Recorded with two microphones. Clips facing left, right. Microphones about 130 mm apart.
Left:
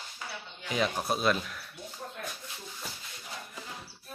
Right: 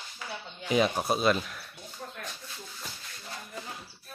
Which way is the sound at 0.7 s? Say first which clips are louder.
Right 5 dB; 20° right (ahead or behind).